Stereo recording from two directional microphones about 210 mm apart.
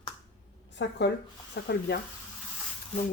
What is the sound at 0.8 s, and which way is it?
Speech, 55° left (ahead or behind).